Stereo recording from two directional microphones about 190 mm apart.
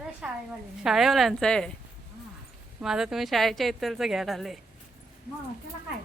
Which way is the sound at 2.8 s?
5° right (ahead or behind).